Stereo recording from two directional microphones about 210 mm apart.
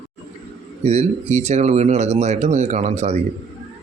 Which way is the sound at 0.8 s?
30° right (ahead or behind).